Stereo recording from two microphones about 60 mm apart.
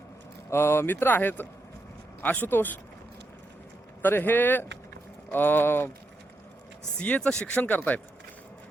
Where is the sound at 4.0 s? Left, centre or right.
Left.